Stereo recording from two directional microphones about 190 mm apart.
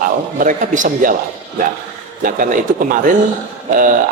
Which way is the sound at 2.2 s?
45° right (ahead or behind).